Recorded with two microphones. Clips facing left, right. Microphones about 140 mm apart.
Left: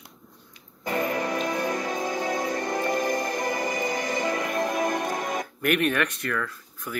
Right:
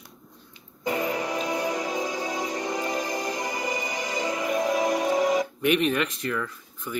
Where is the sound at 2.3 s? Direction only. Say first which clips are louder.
Left 2 dB; 15° right (ahead or behind).